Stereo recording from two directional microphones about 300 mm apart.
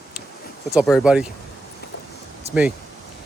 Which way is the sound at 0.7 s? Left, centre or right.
Centre.